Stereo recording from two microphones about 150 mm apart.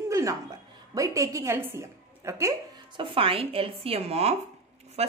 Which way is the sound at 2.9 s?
35° right (ahead or behind).